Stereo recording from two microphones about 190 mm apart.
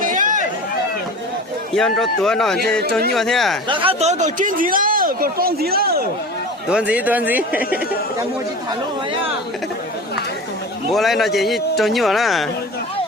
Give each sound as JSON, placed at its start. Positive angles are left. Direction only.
{"t": 0.0, "sound": "run", "side_deg": -45}
{"t": 1.7, "sound": "speech", "side_deg": 5}
{"t": 3.7, "sound": "speech", "side_deg": -30}
{"t": 6.7, "sound": "speech", "side_deg": -5}
{"t": 10.9, "sound": "speech", "side_deg": 0}